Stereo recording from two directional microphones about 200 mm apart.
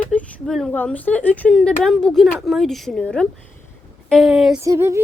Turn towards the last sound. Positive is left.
turn(degrees=-15)  # may be behind; listen again after turning